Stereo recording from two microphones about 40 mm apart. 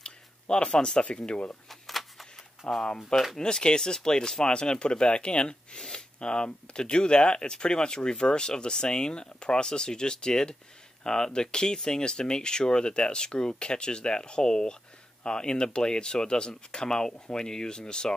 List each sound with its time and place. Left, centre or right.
0.0 s a sound: left
0.7 s speech: centre
1.7 s a sound: centre
2.6 s speech: left
5.8 s speech: centre
6.1 s speech: left